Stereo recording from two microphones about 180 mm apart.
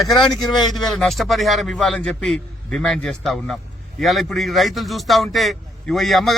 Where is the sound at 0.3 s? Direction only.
20° left (ahead or behind).